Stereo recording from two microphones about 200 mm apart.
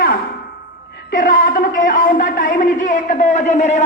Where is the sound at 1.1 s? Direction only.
40° left (ahead or behind).